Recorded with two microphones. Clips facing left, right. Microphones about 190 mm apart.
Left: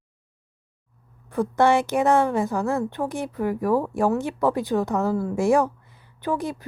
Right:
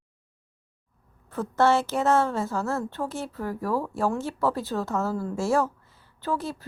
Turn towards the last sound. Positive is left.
turn(degrees=15)  # may be behind; listen again after turning